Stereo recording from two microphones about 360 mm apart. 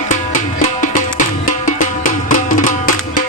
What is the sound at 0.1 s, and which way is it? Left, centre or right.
Music, left.